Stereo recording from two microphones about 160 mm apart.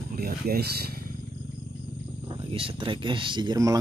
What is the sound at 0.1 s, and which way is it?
Speech, 70° right (ahead or behind).